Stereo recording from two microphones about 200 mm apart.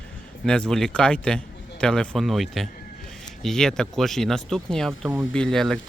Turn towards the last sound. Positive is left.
turn(degrees=0)  # may be behind; listen again after turning